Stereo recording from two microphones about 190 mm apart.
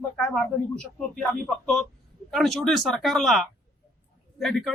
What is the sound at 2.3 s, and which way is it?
Speech, centre (ahead or behind).